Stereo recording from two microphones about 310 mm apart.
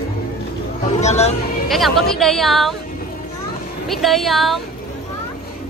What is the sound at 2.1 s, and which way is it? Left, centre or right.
Speech, centre.